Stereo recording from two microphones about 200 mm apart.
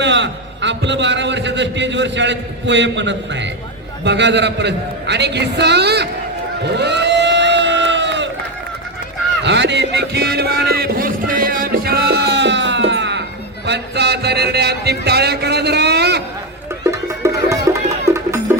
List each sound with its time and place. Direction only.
0.0 s a man's voice: 60° right (ahead or behind)
6.7 s a sound: 60° right (ahead or behind)
9.4 s music: 60° right (ahead or behind)
16.8 s music: 15° right (ahead or behind)